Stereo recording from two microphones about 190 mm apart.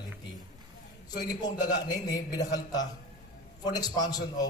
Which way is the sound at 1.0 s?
20° left (ahead or behind).